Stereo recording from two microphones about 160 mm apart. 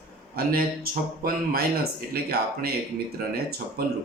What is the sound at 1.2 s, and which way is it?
Speech, 70° right (ahead or behind).